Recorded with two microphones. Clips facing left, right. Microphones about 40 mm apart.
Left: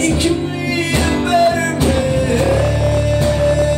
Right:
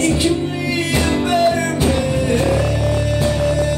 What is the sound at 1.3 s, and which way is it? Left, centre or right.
Music, left.